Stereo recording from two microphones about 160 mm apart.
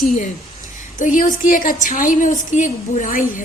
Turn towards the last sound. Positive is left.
turn(degrees=55)  # may be behind; listen again after turning